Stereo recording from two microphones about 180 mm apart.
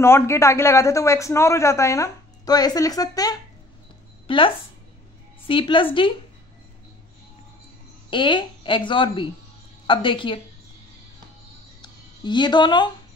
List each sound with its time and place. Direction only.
0.0 s a man's voice: 15° left (ahead or behind)
5.5 s a woman's voice: 30° left (ahead or behind)
8.1 s a woman's voice: 25° left (ahead or behind)
11.8 s music: 25° left (ahead or behind)